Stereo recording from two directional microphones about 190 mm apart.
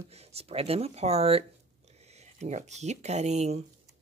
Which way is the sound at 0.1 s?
35° right (ahead or behind).